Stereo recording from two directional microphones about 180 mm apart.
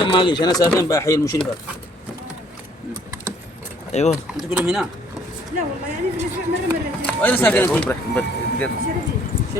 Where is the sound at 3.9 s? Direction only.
40° left (ahead or behind).